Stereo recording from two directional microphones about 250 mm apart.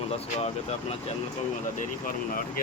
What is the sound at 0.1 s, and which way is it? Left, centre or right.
Speech, left.